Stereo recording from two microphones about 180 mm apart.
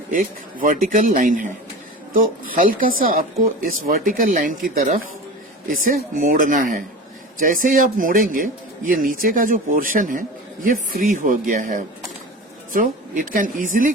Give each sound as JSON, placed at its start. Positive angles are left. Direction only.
{"t": 0.1, "sound": "a man's voice", "side_deg": -50}